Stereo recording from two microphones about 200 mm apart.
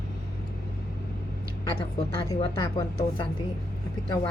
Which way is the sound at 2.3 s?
20° left (ahead or behind).